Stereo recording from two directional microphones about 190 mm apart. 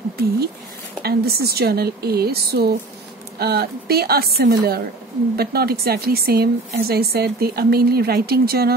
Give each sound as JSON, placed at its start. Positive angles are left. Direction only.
{"t": 1.0, "sound": "speech", "side_deg": -55}